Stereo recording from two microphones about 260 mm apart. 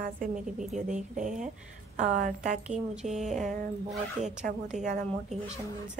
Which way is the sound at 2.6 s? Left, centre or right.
Centre.